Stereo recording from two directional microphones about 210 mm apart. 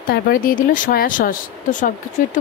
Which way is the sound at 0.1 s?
45° left (ahead or behind).